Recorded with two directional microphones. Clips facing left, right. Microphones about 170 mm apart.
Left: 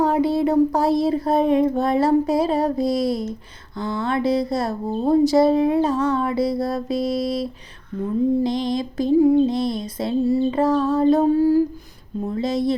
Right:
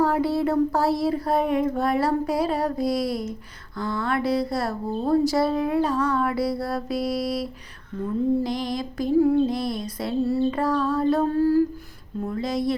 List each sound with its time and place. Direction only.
0.0 s speech: 20° left (ahead or behind)
12.2 s speech: 25° left (ahead or behind)